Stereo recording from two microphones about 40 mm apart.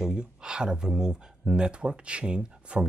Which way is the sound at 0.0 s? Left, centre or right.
Right.